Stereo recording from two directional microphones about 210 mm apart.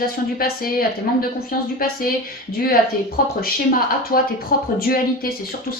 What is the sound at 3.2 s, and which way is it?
Speech, 45° left (ahead or behind).